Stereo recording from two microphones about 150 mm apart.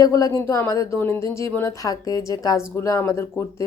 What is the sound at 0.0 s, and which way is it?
Speech, 25° left (ahead or behind).